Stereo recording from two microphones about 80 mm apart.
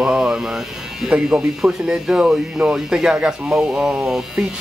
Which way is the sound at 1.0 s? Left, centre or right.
Centre.